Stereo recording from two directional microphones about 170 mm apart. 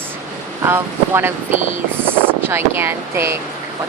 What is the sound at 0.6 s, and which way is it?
Speech, 15° right (ahead or behind).